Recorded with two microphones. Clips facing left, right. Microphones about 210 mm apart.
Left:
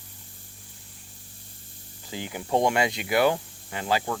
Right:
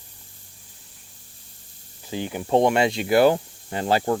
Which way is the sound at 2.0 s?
20° right (ahead or behind).